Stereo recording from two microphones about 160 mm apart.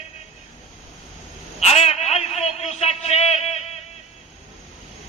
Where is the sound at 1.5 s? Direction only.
40° left (ahead or behind).